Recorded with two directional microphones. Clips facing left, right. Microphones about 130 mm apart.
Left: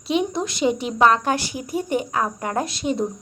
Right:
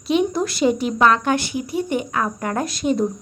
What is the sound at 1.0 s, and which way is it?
A woman's voice, 35° left (ahead or behind).